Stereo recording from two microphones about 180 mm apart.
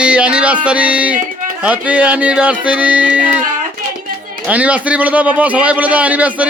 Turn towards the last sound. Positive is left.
turn(degrees=-10)  # may be behind; listen again after turning